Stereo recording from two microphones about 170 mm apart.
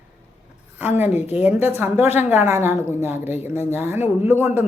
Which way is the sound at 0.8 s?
10° right (ahead or behind).